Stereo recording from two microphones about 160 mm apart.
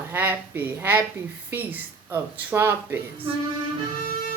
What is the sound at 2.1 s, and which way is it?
Speech, 15° right (ahead or behind).